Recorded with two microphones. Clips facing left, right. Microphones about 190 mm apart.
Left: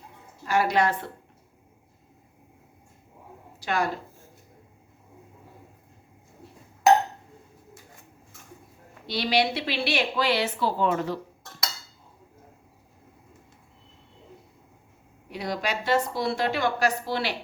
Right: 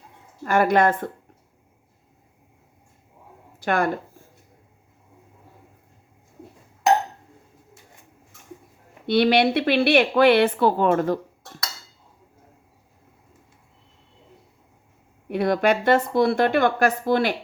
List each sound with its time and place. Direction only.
0.4 s a woman's voice: 50° right (ahead or behind)
3.6 s a woman's voice: 55° right (ahead or behind)
9.0 s speech: 55° right (ahead or behind)
15.3 s speech: 55° right (ahead or behind)